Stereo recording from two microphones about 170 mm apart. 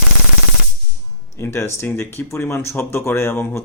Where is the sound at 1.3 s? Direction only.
15° left (ahead or behind).